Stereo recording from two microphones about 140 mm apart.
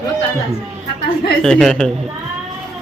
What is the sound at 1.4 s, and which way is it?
Speech, 5° left (ahead or behind).